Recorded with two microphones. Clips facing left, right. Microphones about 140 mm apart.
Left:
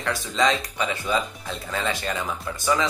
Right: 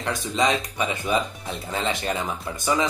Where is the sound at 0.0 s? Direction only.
20° right (ahead or behind).